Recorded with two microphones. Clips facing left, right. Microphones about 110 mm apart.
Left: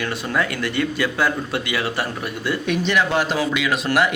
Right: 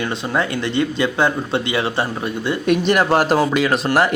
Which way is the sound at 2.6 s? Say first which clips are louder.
Right 5 dB; 50° right (ahead or behind).